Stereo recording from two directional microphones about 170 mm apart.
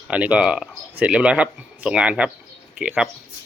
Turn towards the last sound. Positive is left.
turn(degrees=-5)  # may be behind; listen again after turning